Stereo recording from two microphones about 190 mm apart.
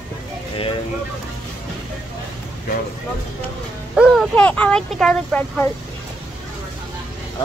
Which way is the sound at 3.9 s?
5° right (ahead or behind).